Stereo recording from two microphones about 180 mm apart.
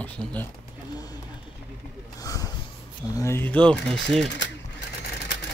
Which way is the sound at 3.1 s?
15° left (ahead or behind).